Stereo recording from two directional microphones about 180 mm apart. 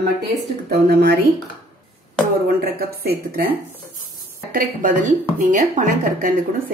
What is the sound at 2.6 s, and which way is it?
Speech, 55° right (ahead or behind).